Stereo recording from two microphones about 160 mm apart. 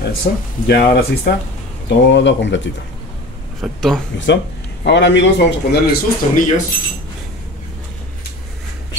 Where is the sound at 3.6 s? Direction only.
Centre (ahead or behind).